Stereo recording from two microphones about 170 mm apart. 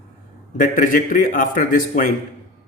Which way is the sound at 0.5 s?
50° left (ahead or behind).